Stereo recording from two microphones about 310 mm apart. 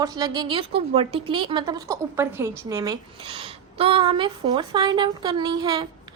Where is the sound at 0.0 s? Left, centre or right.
Centre.